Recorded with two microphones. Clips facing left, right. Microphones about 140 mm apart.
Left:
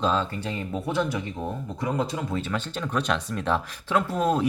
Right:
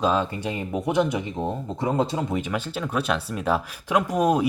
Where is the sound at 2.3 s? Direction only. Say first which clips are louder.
Right 2 dB; 10° right (ahead or behind).